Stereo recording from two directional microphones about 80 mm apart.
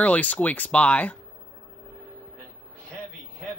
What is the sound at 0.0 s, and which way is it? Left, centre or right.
Speech, centre.